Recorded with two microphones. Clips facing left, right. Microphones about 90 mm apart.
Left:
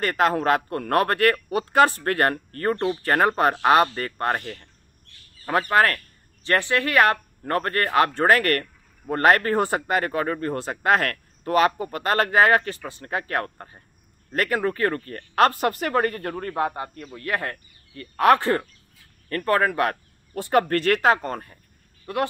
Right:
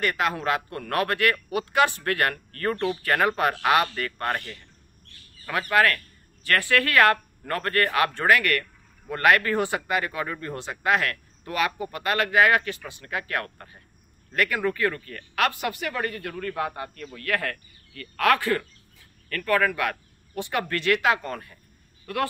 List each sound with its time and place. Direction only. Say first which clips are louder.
0.0 s speech: left 4 dB; 40° left (ahead or behind)